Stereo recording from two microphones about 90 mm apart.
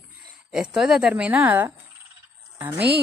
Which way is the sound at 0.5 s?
5° right (ahead or behind).